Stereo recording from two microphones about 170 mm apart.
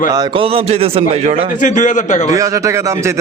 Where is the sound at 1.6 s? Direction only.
50° left (ahead or behind).